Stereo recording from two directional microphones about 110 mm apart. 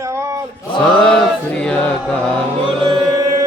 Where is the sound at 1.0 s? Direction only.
5° left (ahead or behind).